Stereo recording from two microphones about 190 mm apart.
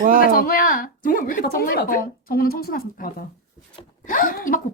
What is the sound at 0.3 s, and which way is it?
Speech, 50° left (ahead or behind).